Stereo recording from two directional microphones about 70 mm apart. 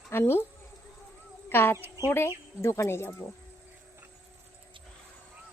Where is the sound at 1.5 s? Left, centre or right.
Left.